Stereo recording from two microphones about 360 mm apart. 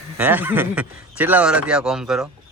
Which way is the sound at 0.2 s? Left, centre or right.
Centre.